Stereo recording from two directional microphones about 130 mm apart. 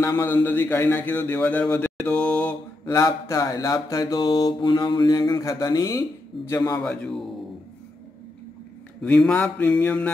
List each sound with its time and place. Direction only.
0.0 s a man's voice: 15° left (ahead or behind)
2.8 s mantra: 25° left (ahead or behind)
6.8 s a man's voice: centre (ahead or behind)
9.0 s a man's voice: 10° left (ahead or behind)